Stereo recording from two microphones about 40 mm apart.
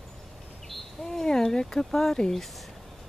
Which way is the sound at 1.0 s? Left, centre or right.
Centre.